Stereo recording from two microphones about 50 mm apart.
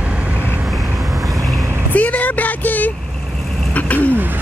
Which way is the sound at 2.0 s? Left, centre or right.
Left.